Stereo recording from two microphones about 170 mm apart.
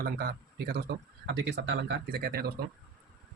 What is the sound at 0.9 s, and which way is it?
Speech, 90° right.